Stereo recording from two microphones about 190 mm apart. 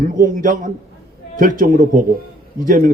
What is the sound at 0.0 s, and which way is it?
A man's voice, 45° right (ahead or behind).